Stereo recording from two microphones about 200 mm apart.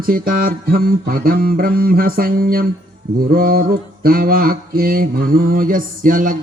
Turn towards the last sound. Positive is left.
turn(degrees=-45)  # may be behind; listen again after turning